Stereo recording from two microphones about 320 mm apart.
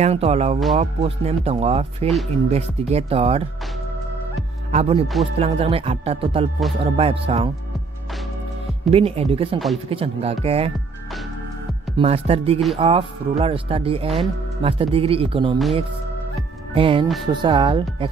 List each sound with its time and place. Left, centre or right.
0.0 s speech: centre
4.7 s speech: centre
8.9 s speech: centre
12.0 s speech: centre
16.7 s speech: centre